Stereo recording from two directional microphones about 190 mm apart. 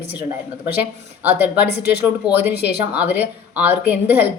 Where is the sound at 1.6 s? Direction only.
60° left (ahead or behind).